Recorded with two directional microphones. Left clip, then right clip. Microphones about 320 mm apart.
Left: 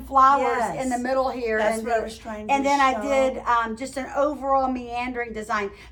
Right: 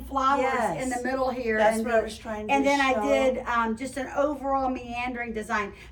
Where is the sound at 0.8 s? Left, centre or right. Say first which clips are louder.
Left 4 dB; centre.